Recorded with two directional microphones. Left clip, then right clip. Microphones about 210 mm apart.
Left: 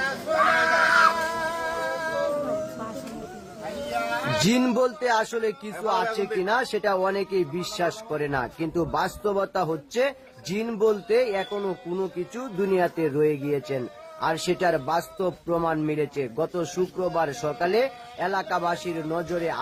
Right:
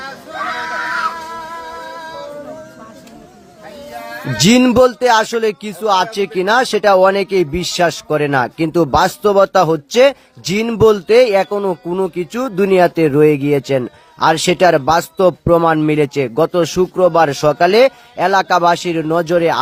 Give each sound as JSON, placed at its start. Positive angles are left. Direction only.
{"t": 4.4, "sound": "speech", "side_deg": -40}